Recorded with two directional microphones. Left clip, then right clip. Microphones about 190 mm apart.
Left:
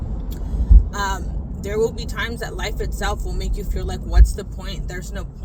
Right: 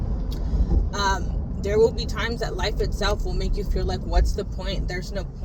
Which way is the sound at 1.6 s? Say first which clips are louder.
Right 2 dB; 20° left (ahead or behind).